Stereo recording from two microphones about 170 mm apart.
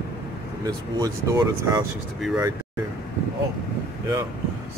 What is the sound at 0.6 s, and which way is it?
Speech, 20° right (ahead or behind).